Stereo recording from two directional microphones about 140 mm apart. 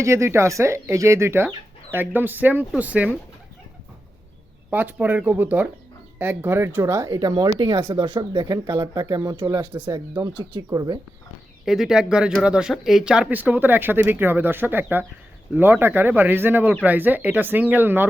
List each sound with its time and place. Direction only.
0.0 s speech: 20° right (ahead or behind)
4.7 s speech: 15° right (ahead or behind); by 9.6 s 30° right (ahead or behind)
9.7 s speech: 15° right (ahead or behind)
10.2 s speech: 35° right (ahead or behind)
10.7 s speech: 25° right (ahead or behind)
11.6 s speech: 5° right (ahead or behind)